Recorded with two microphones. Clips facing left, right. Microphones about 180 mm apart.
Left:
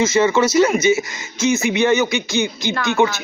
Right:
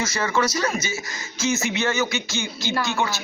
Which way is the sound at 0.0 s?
25° left (ahead or behind).